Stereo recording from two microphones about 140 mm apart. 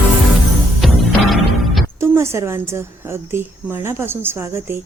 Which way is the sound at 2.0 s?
20° right (ahead or behind).